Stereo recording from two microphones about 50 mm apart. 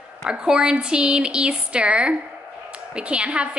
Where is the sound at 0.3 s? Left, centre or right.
Centre.